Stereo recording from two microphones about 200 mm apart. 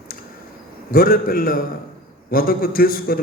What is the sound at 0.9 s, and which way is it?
A man's voice, 45° left (ahead or behind).